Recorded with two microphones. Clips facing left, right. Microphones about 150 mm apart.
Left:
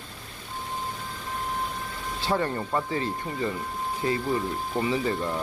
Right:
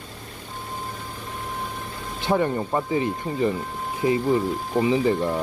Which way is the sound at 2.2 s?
15° right (ahead or behind).